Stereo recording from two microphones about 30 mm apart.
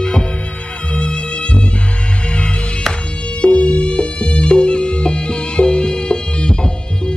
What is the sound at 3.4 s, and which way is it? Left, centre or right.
Music, left.